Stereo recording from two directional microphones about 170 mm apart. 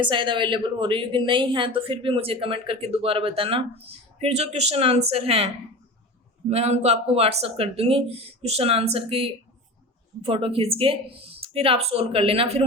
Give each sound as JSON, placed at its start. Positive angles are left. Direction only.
{"t": 0.0, "sound": "speech", "side_deg": -30}
{"t": 6.5, "sound": "speech", "side_deg": -40}